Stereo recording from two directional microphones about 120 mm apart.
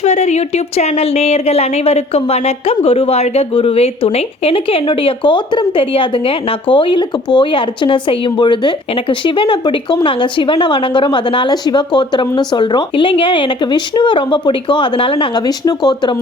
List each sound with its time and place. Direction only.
0.0 s speech: 75° left (ahead or behind); by 15.3 s 50° left (ahead or behind)
15.4 s speech: 35° left (ahead or behind)